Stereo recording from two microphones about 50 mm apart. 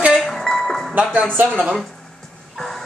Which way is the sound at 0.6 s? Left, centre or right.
Centre.